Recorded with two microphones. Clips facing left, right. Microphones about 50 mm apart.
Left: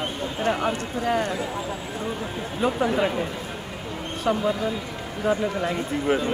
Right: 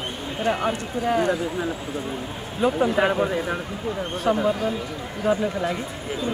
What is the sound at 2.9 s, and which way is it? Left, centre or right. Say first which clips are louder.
Speech: right 3 dB; right.